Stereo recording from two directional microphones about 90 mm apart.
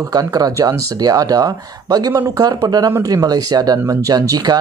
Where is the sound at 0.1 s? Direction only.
45° right (ahead or behind).